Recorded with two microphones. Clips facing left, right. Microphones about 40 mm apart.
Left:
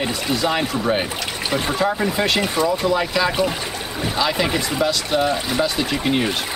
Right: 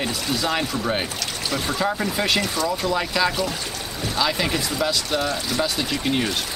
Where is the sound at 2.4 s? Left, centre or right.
Left.